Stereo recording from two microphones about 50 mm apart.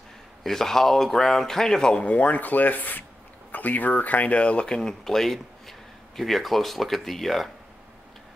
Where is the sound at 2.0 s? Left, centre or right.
Left; by 7.5 s centre.